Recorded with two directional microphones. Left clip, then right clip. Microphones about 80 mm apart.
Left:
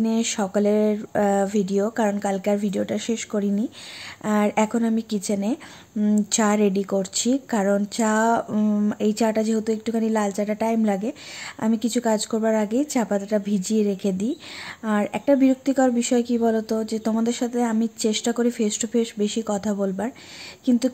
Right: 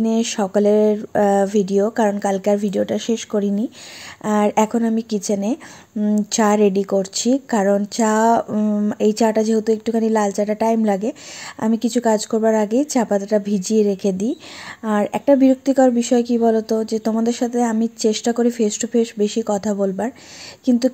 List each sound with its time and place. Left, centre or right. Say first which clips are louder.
0.0 s speech: right 4 dB; right
8.5 s speech: right 3 dB; centre
8.9 s speech: right 7 dB; right